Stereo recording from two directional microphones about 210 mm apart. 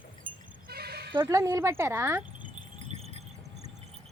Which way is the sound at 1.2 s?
15° right (ahead or behind).